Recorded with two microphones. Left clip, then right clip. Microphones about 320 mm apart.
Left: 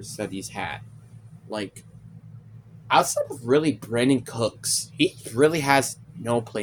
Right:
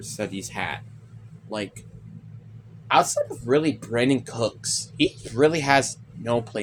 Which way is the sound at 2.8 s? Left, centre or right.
Left.